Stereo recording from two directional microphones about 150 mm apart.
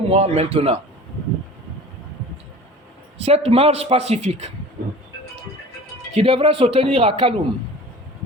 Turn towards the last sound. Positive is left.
turn(degrees=-40)  # may be behind; listen again after turning